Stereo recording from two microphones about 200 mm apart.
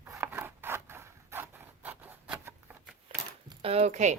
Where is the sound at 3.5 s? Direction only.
30° right (ahead or behind).